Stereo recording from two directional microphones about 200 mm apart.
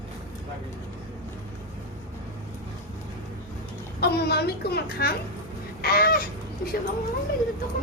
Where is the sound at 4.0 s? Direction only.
55° left (ahead or behind).